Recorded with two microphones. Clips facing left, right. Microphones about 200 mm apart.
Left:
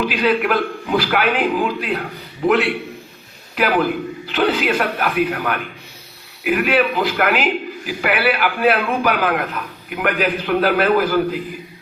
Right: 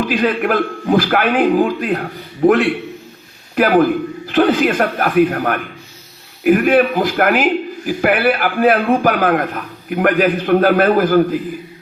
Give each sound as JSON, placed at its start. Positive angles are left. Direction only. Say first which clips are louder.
{"t": 0.0, "sound": "a man's voice", "louder": "right 2 dB", "side_deg": -45}